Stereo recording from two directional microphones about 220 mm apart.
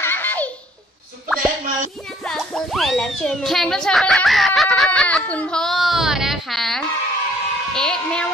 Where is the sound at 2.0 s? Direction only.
Centre (ahead or behind).